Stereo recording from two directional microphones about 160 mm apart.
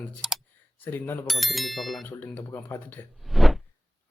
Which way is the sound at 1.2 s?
Centre (ahead or behind).